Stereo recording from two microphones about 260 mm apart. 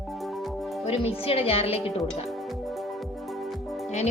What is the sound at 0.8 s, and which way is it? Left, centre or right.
A woman's voice, left.